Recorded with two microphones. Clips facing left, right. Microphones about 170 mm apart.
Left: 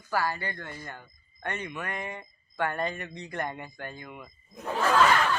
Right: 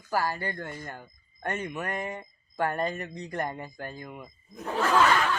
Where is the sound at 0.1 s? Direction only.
40° right (ahead or behind).